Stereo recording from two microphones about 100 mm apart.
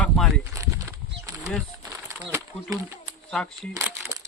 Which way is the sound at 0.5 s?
30° right (ahead or behind).